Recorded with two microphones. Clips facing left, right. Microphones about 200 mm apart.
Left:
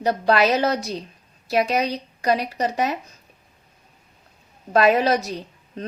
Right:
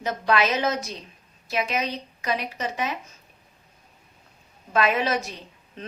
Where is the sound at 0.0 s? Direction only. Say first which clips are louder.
Left 5 dB; 35° left (ahead or behind).